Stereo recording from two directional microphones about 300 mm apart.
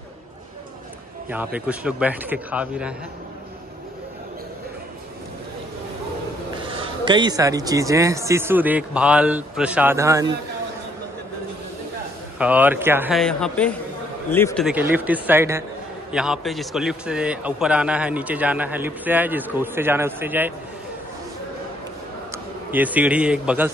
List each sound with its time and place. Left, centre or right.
1.3 s a man's voice: centre
6.7 s speech: centre
12.4 s a man's voice: centre
22.3 s a man's voice: centre